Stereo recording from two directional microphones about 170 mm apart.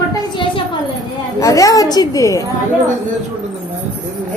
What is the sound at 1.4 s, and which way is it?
A woman's voice, 20° left (ahead or behind).